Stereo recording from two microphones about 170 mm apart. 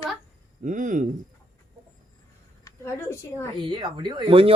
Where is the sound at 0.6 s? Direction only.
50° right (ahead or behind).